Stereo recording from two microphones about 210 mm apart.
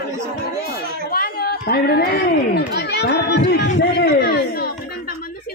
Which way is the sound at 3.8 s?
50° left (ahead or behind).